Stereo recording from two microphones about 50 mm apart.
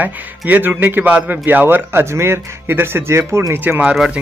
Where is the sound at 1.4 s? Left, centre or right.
Right.